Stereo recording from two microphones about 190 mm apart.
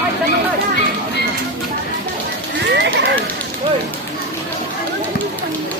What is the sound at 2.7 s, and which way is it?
Run, 70° right (ahead or behind).